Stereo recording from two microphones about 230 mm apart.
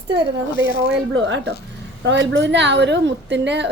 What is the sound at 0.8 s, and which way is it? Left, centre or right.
A woman's voice, right.